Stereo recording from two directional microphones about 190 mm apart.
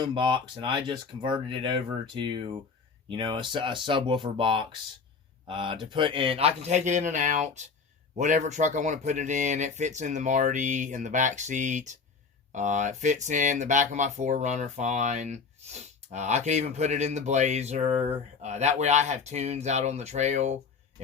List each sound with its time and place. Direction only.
0.0 s speech: 25° right (ahead or behind)